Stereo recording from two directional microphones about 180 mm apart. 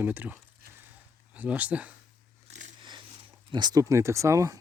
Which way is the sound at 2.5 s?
40° right (ahead or behind).